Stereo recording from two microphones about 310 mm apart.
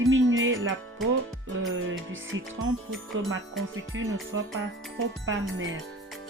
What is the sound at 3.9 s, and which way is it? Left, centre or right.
Speech, right.